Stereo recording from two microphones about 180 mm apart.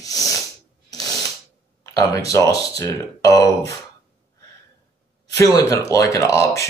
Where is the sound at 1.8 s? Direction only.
20° left (ahead or behind).